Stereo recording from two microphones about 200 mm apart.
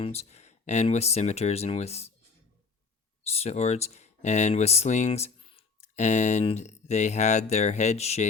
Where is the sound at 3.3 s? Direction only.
30° left (ahead or behind).